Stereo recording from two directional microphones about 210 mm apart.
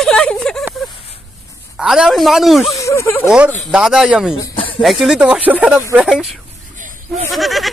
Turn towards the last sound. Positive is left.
turn(degrees=0)  # may be behind; listen again after turning